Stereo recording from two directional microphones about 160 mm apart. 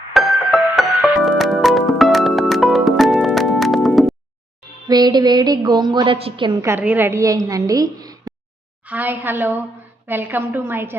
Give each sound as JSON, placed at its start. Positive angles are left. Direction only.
{"t": 0.1, "sound": "music", "side_deg": 0}
{"t": 4.9, "sound": "a woman's voice", "side_deg": -25}
{"t": 8.8, "sound": "a woman's voice", "side_deg": -10}